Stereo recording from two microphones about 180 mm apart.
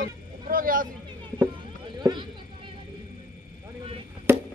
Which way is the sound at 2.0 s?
25° right (ahead or behind).